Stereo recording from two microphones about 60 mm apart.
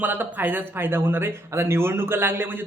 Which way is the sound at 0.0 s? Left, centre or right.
Right.